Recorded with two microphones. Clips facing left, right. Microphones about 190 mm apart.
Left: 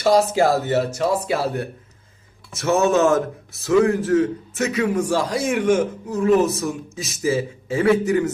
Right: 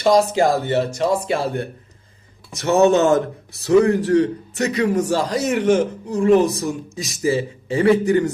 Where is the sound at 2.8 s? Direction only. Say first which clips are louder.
Right 4 dB; centre (ahead or behind).